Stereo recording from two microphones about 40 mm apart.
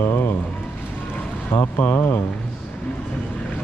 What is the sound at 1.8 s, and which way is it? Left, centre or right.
Speech, left.